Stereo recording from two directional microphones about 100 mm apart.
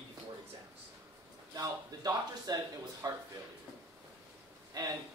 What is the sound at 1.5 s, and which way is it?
A man's voice, 40° right (ahead or behind).